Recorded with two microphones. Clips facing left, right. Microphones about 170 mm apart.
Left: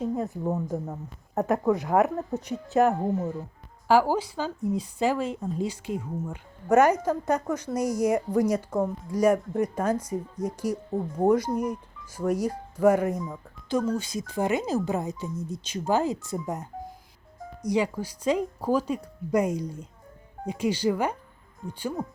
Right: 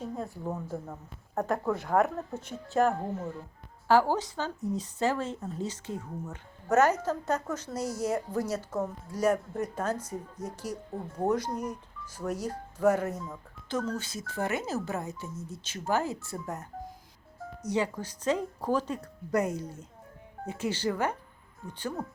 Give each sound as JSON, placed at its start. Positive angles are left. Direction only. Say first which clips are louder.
{"t": 0.3, "sound": "speech", "louder": "left 7 dB", "side_deg": 20}
{"t": 1.4, "sound": "speech", "louder": "left 5 dB", "side_deg": 0}
{"t": 1.9, "sound": "speech", "louder": "left 2 dB", "side_deg": 15}
{"t": 2.5, "sound": "speech", "louder": "left 4 dB", "side_deg": 0}
{"t": 2.9, "sound": "speech", "louder": "left 7 dB", "side_deg": 20}